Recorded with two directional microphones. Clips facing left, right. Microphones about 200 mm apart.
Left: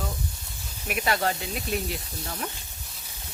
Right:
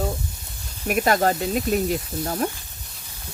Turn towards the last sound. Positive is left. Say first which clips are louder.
# right 10 dB
turn(degrees=-45)  # may be behind; listen again after turning